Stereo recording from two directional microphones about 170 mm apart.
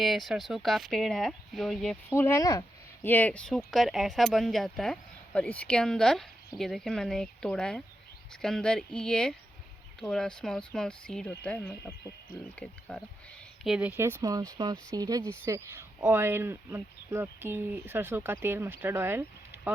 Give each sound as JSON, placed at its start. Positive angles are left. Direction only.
{"t": 0.0, "sound": "speech", "side_deg": 0}
{"t": 2.0, "sound": "speech", "side_deg": 15}
{"t": 13.7, "sound": "speech", "side_deg": -5}